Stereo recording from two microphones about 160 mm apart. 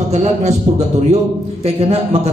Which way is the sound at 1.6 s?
40° right (ahead or behind).